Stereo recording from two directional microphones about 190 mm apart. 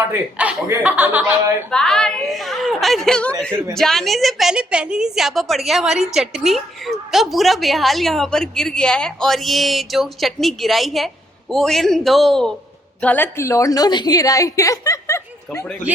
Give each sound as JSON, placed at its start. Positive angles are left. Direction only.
{"t": 0.1, "sound": "a man's voice", "side_deg": -10}
{"t": 1.7, "sound": "a woman's voice", "side_deg": 5}